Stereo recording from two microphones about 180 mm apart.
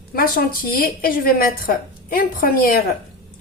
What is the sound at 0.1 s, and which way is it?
A woman's voice, 55° left (ahead or behind).